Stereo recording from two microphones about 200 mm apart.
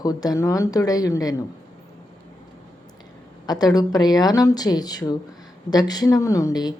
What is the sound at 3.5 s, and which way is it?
Speech, 20° left (ahead or behind).